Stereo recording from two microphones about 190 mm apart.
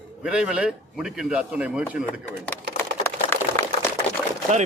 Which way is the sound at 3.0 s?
10° left (ahead or behind).